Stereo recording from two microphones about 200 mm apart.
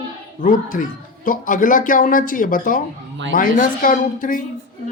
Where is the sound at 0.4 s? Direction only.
40° left (ahead or behind).